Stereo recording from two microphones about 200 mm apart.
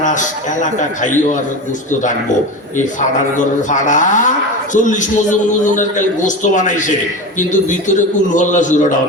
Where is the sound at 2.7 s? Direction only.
40° left (ahead or behind).